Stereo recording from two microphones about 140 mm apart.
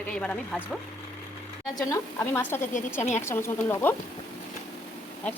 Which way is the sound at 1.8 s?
20° left (ahead or behind).